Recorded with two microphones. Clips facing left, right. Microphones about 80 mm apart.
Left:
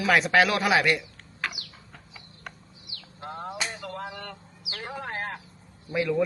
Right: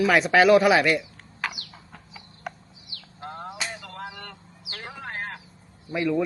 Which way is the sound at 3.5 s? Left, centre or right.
Centre.